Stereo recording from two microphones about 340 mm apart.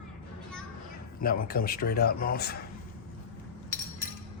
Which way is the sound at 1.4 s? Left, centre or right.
Left.